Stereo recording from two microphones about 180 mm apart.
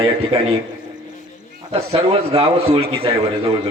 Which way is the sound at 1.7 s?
35° right (ahead or behind).